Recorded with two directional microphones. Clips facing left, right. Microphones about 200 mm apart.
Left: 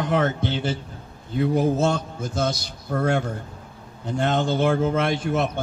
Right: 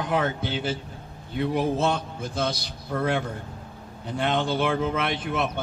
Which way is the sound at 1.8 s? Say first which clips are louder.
Left 3 dB; 45° left (ahead or behind).